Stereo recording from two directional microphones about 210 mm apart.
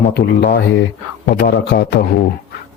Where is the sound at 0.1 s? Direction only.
50° left (ahead or behind).